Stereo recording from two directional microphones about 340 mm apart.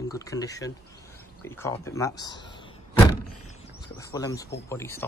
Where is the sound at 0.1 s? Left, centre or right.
Centre.